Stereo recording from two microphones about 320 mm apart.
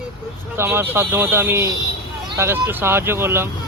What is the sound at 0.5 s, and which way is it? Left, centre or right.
A man's voice, centre.